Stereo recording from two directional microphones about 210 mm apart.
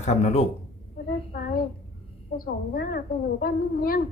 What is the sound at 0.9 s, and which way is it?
A child's voice, 45° left (ahead or behind).